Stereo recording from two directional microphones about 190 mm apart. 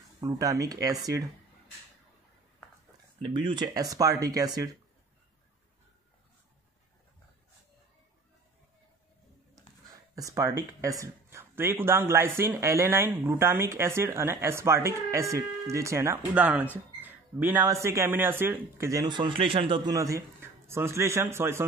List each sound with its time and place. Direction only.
0.2 s speech: 20° right (ahead or behind)
3.2 s speech: 25° right (ahead or behind)
10.1 s speech: 15° right (ahead or behind)